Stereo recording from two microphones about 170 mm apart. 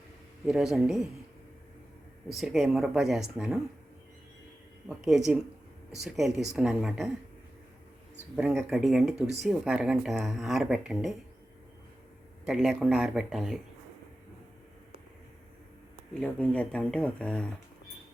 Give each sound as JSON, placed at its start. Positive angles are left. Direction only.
{"t": 0.4, "sound": "speech", "side_deg": -5}
{"t": 2.3, "sound": "speech", "side_deg": 0}
{"t": 5.0, "sound": "speech", "side_deg": -5}
{"t": 8.7, "sound": "speech", "side_deg": 0}
{"t": 12.5, "sound": "speech", "side_deg": -5}
{"t": 16.2, "sound": "speech", "side_deg": 10}